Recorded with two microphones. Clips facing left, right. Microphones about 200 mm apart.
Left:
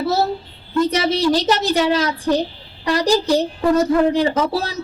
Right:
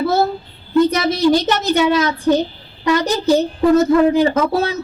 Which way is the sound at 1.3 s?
35° left (ahead or behind).